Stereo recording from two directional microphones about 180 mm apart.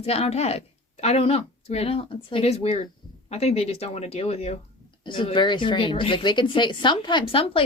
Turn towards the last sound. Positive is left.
turn(degrees=30)  # may be behind; listen again after turning